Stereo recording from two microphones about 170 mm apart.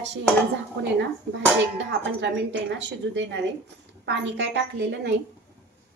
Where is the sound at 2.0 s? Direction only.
90° right.